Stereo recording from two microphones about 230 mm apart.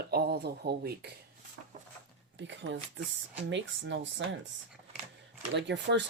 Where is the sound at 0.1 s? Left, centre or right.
Right.